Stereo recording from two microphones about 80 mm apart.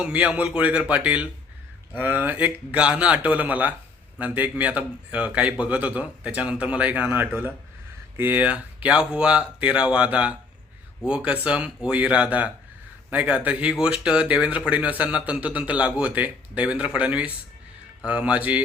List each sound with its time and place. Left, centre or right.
0.0 s a man's voice: centre